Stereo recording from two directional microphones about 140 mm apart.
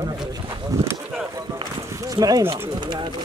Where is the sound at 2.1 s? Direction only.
25° right (ahead or behind).